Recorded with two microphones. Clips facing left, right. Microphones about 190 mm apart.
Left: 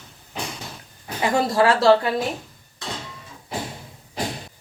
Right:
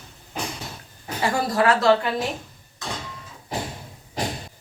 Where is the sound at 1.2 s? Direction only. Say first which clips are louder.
Left 3 dB; 20° left (ahead or behind).